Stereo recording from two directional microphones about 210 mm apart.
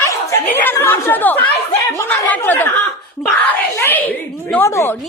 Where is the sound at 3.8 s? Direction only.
10° left (ahead or behind).